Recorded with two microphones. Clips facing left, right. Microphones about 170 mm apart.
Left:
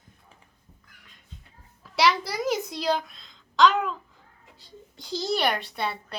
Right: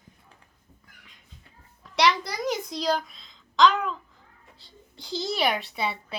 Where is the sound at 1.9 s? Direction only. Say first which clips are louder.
Even; 5° left (ahead or behind).